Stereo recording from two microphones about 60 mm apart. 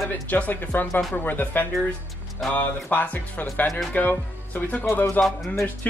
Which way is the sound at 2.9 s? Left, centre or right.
Left.